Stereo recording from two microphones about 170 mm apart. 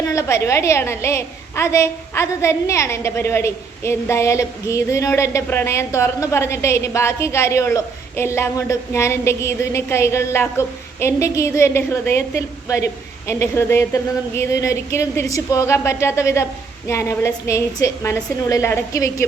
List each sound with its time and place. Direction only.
0.1 s a woman's voice: 15° left (ahead or behind)